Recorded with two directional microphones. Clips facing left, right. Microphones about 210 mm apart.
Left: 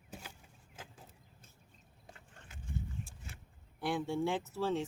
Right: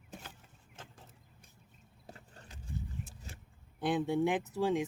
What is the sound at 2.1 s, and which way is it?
Vehicle, 35° right (ahead or behind).